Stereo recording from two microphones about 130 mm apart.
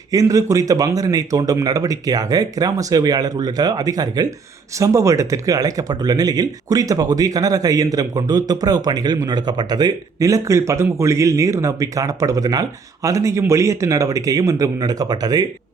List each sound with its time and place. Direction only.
0.1 s speech: 25° right (ahead or behind)